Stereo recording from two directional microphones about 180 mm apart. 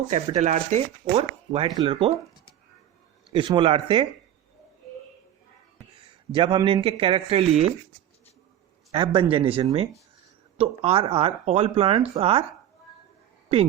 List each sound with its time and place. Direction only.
0.1 s speech: 40° right (ahead or behind)
1.5 s a man's voice: 25° right (ahead or behind)
3.3 s a man's voice: 30° right (ahead or behind)
6.3 s a man's voice: 25° right (ahead or behind)
8.9 s speech: 30° right (ahead or behind)